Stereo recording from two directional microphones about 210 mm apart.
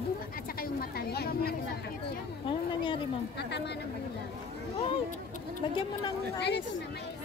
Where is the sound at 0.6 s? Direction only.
45° left (ahead or behind).